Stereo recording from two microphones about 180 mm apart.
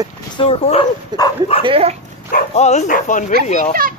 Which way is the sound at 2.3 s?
40° left (ahead or behind).